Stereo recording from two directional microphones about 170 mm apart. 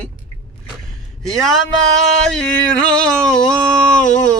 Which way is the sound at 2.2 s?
5° left (ahead or behind).